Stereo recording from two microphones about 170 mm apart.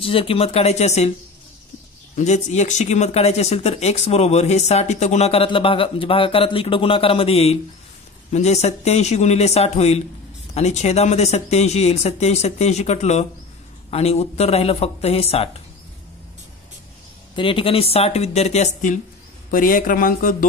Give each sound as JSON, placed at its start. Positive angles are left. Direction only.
{"t": 0.0, "sound": "speech", "side_deg": 30}
{"t": 2.1, "sound": "speech", "side_deg": 40}
{"t": 17.4, "sound": "speech", "side_deg": 30}